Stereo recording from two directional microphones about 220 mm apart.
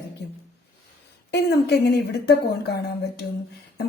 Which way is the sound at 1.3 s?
50° left (ahead or behind).